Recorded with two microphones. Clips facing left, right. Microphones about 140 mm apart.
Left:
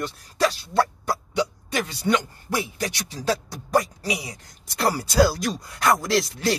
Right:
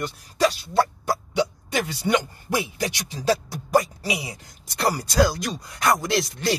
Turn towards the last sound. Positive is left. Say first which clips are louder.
# left 1 dB
turn(degrees=0)  # may be behind; listen again after turning